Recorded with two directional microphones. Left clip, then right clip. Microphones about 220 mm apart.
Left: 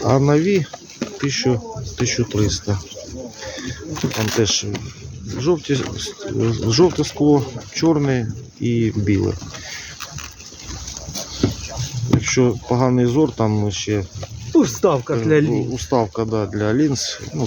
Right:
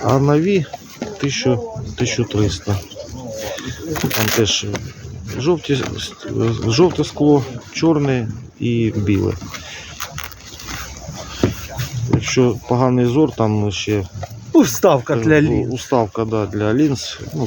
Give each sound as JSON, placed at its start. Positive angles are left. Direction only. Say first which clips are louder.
{"t": 0.0, "sound": "speech", "louder": "right 1 dB", "side_deg": 5}
{"t": 3.9, "sound": "speech", "louder": "right 3 dB", "side_deg": -45}
{"t": 4.4, "sound": "speech", "louder": "right 2 dB", "side_deg": 0}
{"t": 12.2, "sound": "speech", "louder": "right 2 dB", "side_deg": 0}
{"t": 14.5, "sound": "speech", "louder": "right 3 dB", "side_deg": -50}
{"t": 15.5, "sound": "speech", "louder": "right 2 dB", "side_deg": 0}